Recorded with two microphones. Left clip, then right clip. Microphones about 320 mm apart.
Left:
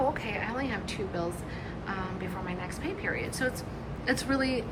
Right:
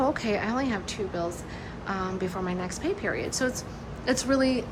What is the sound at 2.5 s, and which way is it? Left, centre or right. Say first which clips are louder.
A woman's voice: right 5 dB; centre.